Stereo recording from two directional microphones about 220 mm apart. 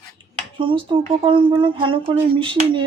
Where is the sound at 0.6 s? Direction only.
20° right (ahead or behind).